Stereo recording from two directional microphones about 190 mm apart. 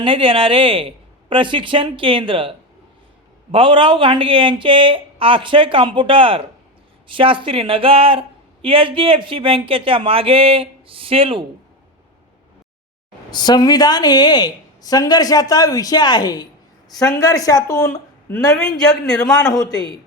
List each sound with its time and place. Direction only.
0.0 s speech: 25° right (ahead or behind)
13.3 s a woman's voice: 20° left (ahead or behind)
18.5 s a man's voice: 5° left (ahead or behind)